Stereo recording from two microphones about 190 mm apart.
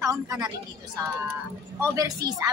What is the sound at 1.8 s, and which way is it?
Speech, 20° right (ahead or behind).